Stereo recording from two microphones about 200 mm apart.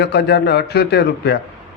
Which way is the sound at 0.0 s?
55° left (ahead or behind).